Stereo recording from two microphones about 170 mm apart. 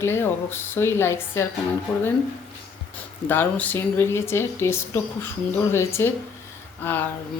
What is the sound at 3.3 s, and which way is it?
A woman's voice, 10° left (ahead or behind).